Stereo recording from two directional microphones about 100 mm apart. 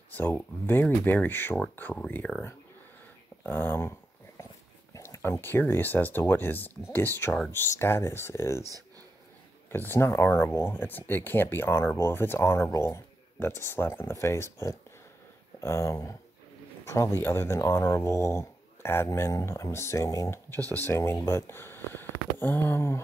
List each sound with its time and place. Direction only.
0.1 s speech: 20° left (ahead or behind)
3.4 s speech: 20° left (ahead or behind)
4.9 s speech: 25° left (ahead or behind)
9.7 s speech: 25° left (ahead or behind)